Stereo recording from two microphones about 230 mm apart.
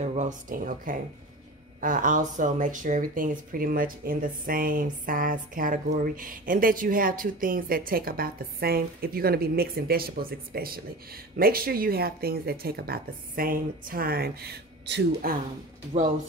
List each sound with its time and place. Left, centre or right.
0.0 s speech: right